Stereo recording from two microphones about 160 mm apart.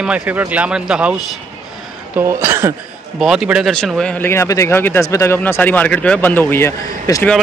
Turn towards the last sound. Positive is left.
turn(degrees=15)  # may be behind; listen again after turning